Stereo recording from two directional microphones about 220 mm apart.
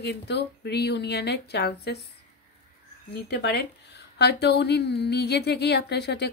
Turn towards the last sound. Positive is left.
turn(degrees=50)  # may be behind; listen again after turning